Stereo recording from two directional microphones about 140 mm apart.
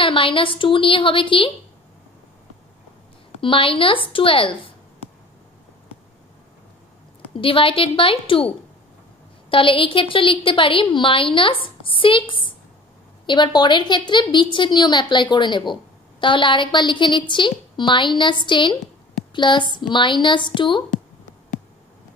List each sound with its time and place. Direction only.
0.0 s a woman's voice: 40° left (ahead or behind)
3.3 s a woman's voice: 40° left (ahead or behind)
7.2 s a woman's voice: 40° left (ahead or behind)
9.5 s a woman's voice: 40° left (ahead or behind)